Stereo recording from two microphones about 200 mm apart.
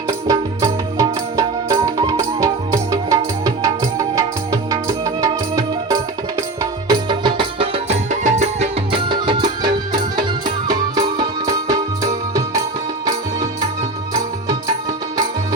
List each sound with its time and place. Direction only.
0.3 s music: 15° right (ahead or behind)